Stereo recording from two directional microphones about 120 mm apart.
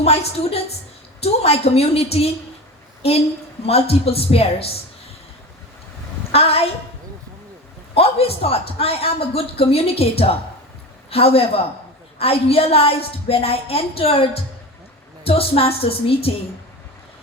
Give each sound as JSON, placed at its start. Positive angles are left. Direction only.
{"t": 0.0, "sound": "a woman's voice", "side_deg": 60}
{"t": 6.3, "sound": "a woman's voice", "side_deg": 55}
{"t": 7.9, "sound": "a woman's voice", "side_deg": 55}